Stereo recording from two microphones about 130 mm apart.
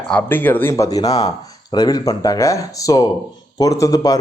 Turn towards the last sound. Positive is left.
turn(degrees=30)  # may be behind; listen again after turning